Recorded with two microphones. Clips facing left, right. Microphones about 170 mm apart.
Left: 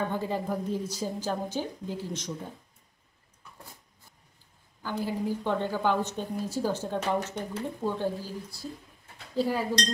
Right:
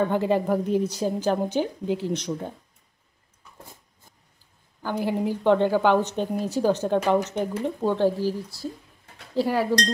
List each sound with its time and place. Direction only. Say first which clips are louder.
0.1 s a woman's voice: right 8 dB; 70° right (ahead or behind)
4.8 s a woman's voice: right 5 dB; 70° right (ahead or behind); by 8.5 s 85° right
9.4 s a woman's voice: right 5 dB; 75° right (ahead or behind)